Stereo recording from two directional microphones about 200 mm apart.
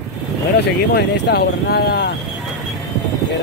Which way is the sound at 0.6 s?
55° left (ahead or behind).